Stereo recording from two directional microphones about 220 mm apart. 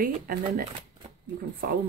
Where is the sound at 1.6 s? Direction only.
40° right (ahead or behind).